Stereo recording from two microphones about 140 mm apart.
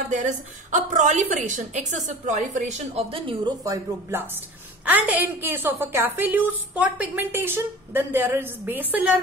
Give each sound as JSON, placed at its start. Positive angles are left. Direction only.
{"t": 0.1, "sound": "a woman's voice", "side_deg": -60}
{"t": 3.6, "sound": "a woman's voice", "side_deg": -20}